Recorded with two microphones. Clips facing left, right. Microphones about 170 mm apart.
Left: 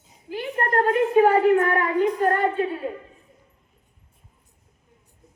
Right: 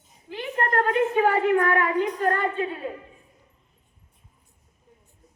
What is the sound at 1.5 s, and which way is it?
Child singing, 30° left (ahead or behind).